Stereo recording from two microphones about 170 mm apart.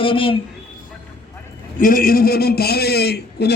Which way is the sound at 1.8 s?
55° left (ahead or behind).